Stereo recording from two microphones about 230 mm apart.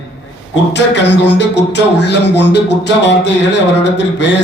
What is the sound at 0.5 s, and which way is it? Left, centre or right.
A man's voice, left.